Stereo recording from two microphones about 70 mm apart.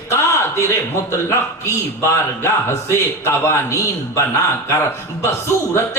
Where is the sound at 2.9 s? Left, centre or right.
Left.